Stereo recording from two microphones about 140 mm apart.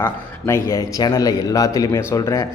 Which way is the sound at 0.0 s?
20° left (ahead or behind).